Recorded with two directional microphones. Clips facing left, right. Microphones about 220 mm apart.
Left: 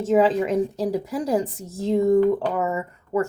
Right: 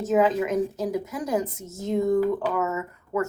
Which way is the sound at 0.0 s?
30° left (ahead or behind).